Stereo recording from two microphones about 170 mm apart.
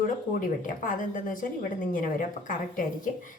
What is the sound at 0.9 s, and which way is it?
A woman's voice, 50° left (ahead or behind).